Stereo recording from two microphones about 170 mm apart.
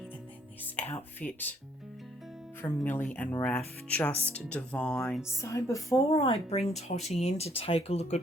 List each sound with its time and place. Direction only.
0.6 s speech: 10° left (ahead or behind)
2.6 s speech: 10° left (ahead or behind)
5.4 s speech: 15° left (ahead or behind)
6.1 s speech: 35° left (ahead or behind)